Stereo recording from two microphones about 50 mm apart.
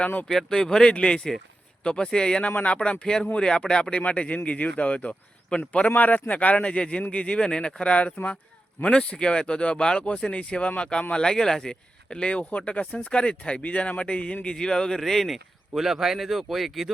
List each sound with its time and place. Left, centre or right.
0.3 s speech: centre
5.9 s speech: left; by 15.8 s centre
15.8 s speech: centre